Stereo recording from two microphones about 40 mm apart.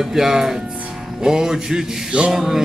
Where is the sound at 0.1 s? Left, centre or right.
Centre.